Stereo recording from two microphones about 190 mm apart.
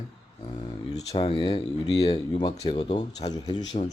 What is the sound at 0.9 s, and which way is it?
Speech, 30° left (ahead or behind).